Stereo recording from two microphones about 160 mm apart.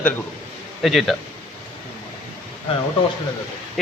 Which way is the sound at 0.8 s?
Centre (ahead or behind).